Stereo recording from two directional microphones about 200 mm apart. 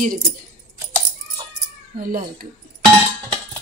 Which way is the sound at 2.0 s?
45° right (ahead or behind).